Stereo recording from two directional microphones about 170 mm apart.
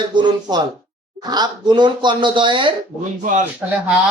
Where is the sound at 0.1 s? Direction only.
25° right (ahead or behind).